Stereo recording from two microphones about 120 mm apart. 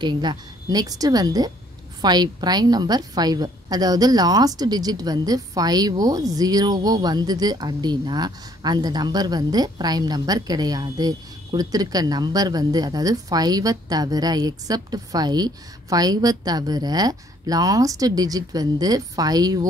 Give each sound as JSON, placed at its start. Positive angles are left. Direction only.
{"t": 0.0, "sound": "a woman's voice", "side_deg": -40}